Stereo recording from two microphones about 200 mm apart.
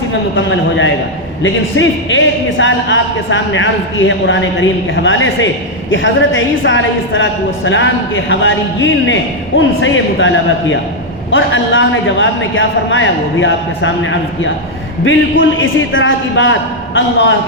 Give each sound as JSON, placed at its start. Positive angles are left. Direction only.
{"t": 0.1, "sound": "a man's voice", "side_deg": 70}